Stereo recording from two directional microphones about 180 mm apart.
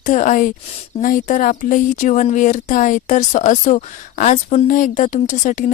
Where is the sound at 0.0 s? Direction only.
45° left (ahead or behind).